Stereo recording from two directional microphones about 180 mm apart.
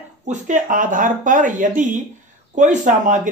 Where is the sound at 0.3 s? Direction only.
45° right (ahead or behind).